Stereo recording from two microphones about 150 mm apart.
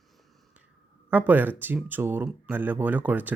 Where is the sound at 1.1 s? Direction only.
10° right (ahead or behind).